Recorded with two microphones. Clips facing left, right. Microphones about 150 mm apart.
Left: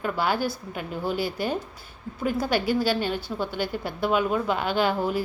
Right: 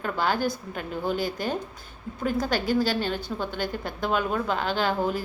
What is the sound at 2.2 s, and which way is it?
A woman's voice, 10° left (ahead or behind).